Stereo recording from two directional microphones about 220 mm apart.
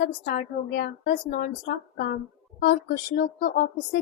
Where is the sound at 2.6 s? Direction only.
40° left (ahead or behind).